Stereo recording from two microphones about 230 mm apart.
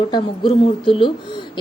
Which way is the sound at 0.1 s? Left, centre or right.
Left.